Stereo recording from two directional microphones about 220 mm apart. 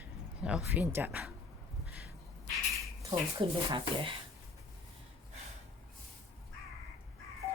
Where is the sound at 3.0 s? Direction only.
20° right (ahead or behind).